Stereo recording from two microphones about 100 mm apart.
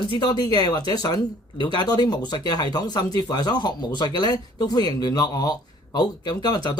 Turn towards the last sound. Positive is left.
turn(degrees=45)  # may be behind; listen again after turning